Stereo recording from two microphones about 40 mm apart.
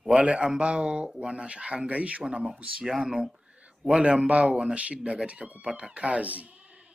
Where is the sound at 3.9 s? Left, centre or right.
Right.